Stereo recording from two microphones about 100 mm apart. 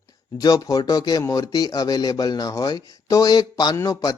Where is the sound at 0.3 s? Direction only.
35° left (ahead or behind).